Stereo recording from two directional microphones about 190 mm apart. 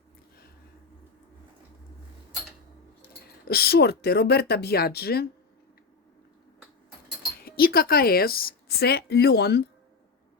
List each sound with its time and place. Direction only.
3.4 s speech: 55° left (ahead or behind)
7.4 s a woman's voice: 50° left (ahead or behind)